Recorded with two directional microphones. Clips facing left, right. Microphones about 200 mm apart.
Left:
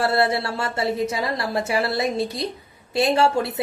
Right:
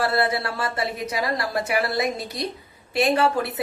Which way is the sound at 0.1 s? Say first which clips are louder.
Left 2 dB; 25° left (ahead or behind).